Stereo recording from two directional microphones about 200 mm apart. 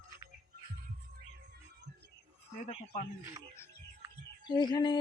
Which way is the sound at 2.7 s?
30° left (ahead or behind).